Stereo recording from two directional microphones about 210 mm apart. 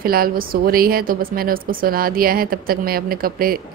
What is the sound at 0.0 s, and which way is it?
A woman's voice, 45° right (ahead or behind).